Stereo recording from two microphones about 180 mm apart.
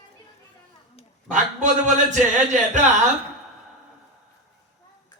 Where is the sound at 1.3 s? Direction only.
45° right (ahead or behind).